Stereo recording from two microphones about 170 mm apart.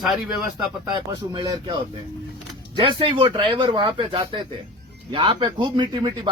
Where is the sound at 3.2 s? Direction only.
30° right (ahead or behind).